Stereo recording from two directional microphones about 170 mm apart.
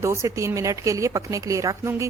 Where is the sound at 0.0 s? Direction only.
15° right (ahead or behind).